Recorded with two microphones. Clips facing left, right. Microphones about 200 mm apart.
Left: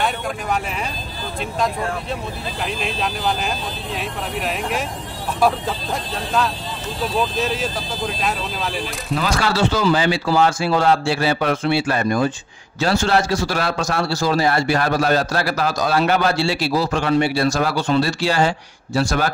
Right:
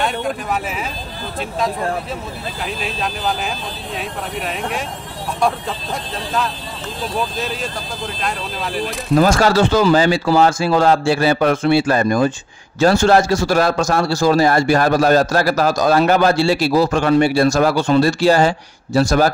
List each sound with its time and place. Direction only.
2.6 s speech: centre (ahead or behind)
7.2 s speech: centre (ahead or behind)
9.1 s a man's voice: 45° right (ahead or behind)